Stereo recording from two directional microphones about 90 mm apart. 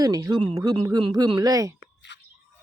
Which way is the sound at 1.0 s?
60° right (ahead or behind).